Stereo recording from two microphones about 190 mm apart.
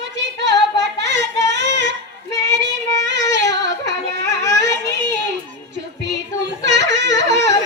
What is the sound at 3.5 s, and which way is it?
Yodeling, 65° right (ahead or behind).